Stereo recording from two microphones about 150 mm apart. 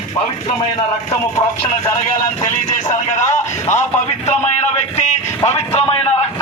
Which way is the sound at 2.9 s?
55° left (ahead or behind).